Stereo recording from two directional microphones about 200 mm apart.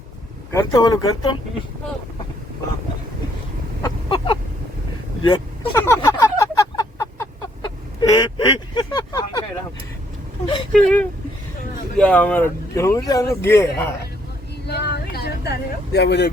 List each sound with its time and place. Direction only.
0.5 s speech: 15° left (ahead or behind)
3.8 s chicken: 25° left (ahead or behind)
5.2 s speech: 20° left (ahead or behind)
5.8 s a sound: 15° left (ahead or behind)
8.1 s speech: 20° left (ahead or behind)
10.7 s speech: 5° left (ahead or behind)
14.7 s vehicle: 55° left (ahead or behind)